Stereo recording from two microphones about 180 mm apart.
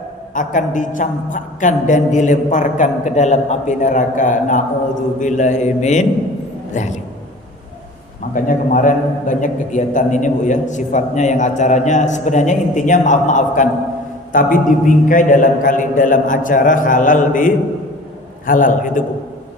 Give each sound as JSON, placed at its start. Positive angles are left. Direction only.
{"t": 0.3, "sound": "a woman's voice", "side_deg": 45}
{"t": 8.3, "sound": "a woman's voice", "side_deg": 45}